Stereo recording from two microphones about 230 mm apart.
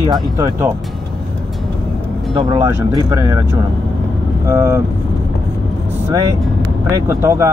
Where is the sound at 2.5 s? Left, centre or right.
Centre.